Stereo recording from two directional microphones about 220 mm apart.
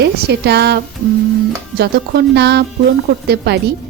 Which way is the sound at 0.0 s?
50° right (ahead or behind).